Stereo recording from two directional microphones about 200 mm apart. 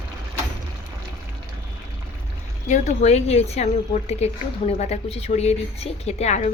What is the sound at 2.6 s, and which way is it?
A woman's voice, 35° left (ahead or behind).